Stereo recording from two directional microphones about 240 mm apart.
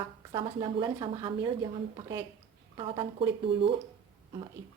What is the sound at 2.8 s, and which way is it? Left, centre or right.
A woman's voice, right.